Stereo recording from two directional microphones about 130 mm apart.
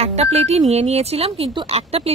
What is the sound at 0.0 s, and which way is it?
A woman's voice, 55° right (ahead or behind).